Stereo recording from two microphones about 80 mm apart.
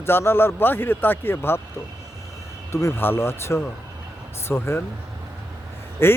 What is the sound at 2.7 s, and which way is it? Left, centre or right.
Speech, left.